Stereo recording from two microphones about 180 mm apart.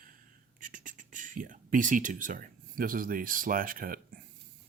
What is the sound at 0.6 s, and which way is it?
Speech, 45° right (ahead or behind).